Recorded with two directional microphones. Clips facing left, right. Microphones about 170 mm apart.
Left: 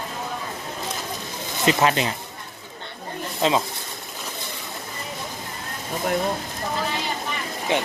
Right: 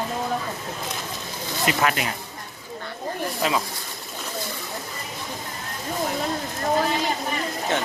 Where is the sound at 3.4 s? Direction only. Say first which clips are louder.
Left 4 dB; 25° left (ahead or behind).